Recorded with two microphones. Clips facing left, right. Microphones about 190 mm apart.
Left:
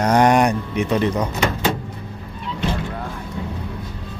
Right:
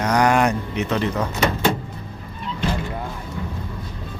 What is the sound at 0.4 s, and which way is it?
Speech, 15° left (ahead or behind).